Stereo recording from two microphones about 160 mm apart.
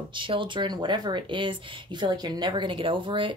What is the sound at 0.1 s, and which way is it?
A woman's voice, 30° right (ahead or behind).